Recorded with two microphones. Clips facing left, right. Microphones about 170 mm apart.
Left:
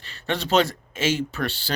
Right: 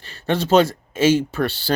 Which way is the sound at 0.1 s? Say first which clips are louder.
Right 6 dB; 45° right (ahead or behind).